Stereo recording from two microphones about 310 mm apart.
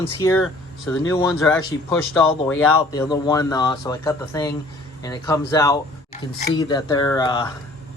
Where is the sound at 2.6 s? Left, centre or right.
Centre.